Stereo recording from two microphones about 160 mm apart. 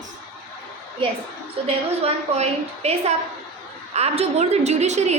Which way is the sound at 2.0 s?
40° right (ahead or behind).